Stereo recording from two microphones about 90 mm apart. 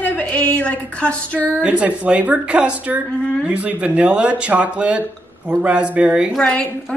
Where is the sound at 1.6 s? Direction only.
15° right (ahead or behind).